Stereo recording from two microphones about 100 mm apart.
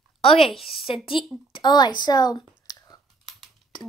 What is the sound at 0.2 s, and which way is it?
A woman's voice, 70° left (ahead or behind).